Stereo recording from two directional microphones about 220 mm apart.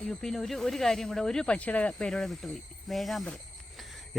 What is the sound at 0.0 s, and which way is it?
A man's voice, centre (ahead or behind).